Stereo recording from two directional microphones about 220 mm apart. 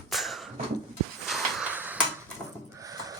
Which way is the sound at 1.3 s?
5° right (ahead or behind).